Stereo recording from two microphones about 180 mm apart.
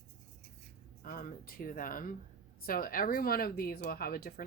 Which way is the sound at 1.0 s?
55° left (ahead or behind).